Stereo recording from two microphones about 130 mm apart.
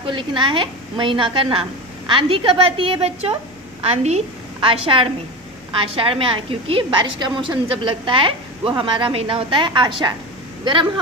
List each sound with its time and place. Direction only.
0.0 s a woman's voice: 40° right (ahead or behind)